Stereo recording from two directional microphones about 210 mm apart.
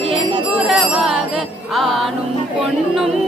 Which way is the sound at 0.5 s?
Centre (ahead or behind).